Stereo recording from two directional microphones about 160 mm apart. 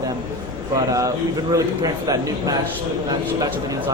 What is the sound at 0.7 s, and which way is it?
A man's voice, 20° right (ahead or behind).